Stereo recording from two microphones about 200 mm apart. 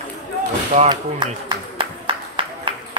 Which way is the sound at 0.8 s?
20° right (ahead or behind).